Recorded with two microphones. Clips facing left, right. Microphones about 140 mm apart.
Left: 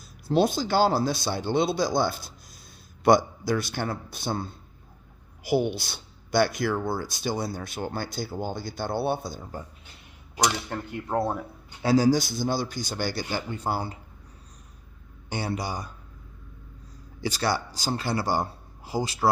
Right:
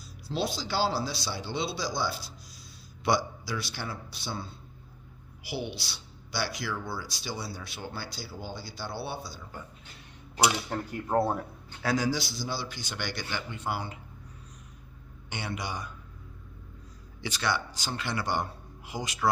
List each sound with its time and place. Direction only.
0.3 s speech: 50° left (ahead or behind)
10.4 s speech: 5° right (ahead or behind)
11.8 s speech: 30° left (ahead or behind)
15.3 s speech: 35° left (ahead or behind)
17.2 s a man's voice: 40° left (ahead or behind)